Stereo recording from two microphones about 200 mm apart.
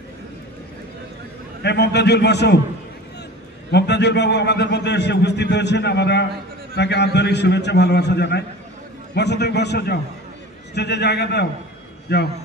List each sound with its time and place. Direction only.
1.6 s a man's voice: 55° left (ahead or behind)
3.7 s a man's voice: 60° left (ahead or behind)